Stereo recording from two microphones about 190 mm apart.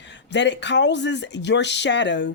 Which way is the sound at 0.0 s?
70° left (ahead or behind).